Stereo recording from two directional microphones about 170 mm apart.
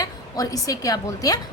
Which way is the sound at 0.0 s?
20° left (ahead or behind).